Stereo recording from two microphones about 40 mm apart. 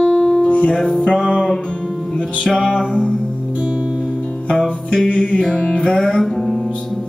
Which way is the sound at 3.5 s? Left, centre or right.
Centre.